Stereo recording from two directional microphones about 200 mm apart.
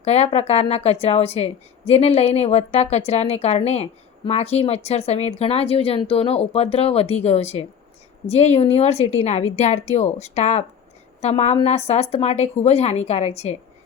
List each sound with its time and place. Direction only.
0.0 s speech: 30° left (ahead or behind)